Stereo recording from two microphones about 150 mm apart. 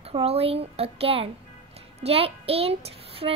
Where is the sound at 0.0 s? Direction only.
40° right (ahead or behind).